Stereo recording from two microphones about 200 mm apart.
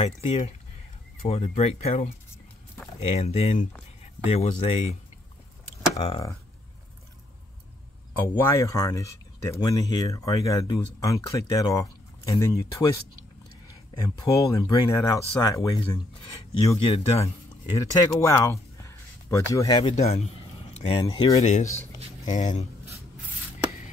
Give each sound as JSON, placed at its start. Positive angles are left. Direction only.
{"t": 0.0, "sound": "speech", "side_deg": 30}
{"t": 5.9, "sound": "speech", "side_deg": 30}
{"t": 8.5, "sound": "speech", "side_deg": 15}
{"t": 13.9, "sound": "speech", "side_deg": 20}
{"t": 16.3, "sound": "speech", "side_deg": 30}
{"t": 18.2, "sound": "a sound", "side_deg": 15}
{"t": 19.8, "sound": "speech", "side_deg": 30}